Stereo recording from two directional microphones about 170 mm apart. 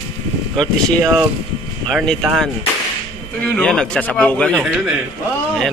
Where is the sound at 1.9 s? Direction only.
5° left (ahead or behind).